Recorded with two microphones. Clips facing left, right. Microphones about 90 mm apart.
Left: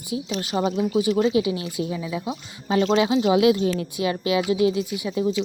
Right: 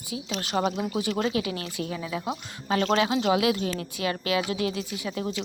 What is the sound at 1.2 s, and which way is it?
Speech, 20° left (ahead or behind).